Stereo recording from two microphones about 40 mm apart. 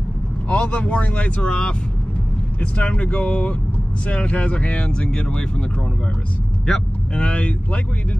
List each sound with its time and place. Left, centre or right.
0.5 s speech: left
1.5 s speech: left
2.6 s speech: left
7.2 s speech: left